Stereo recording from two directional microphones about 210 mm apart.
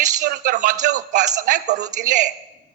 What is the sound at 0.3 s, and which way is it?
A man's voice, 45° right (ahead or behind).